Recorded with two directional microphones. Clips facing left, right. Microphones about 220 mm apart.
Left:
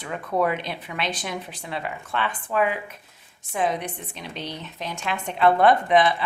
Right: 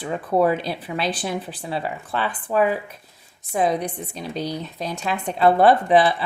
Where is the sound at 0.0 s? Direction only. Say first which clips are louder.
Right 5 dB; 30° right (ahead or behind).